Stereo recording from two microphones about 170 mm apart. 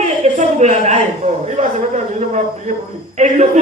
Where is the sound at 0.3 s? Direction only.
40° right (ahead or behind).